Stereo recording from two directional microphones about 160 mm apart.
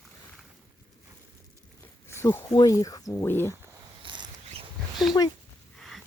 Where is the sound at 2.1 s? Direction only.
15° left (ahead or behind).